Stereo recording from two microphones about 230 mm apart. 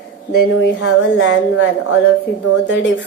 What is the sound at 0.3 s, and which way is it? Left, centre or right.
A woman's voice, left.